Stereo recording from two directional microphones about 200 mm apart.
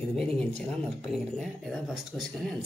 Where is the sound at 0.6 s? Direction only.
Centre (ahead or behind).